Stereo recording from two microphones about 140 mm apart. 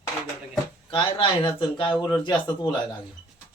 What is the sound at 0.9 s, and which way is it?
A man's voice, 35° left (ahead or behind).